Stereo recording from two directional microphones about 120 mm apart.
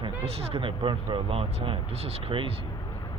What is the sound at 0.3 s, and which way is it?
Speech, 55° right (ahead or behind).